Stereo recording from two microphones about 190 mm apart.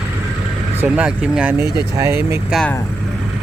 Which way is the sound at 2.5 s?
5° left (ahead or behind).